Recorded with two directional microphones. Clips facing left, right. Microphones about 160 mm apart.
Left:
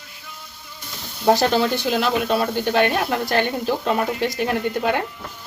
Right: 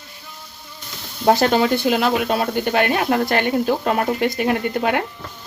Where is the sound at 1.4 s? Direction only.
60° right (ahead or behind).